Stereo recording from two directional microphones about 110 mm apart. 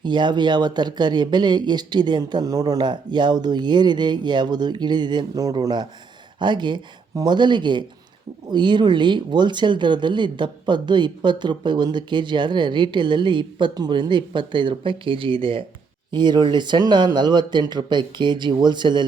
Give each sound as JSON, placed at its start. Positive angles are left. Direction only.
{"t": 0.0, "sound": "speech", "side_deg": -45}